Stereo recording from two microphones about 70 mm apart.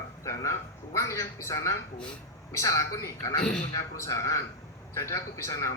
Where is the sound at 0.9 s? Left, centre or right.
Left.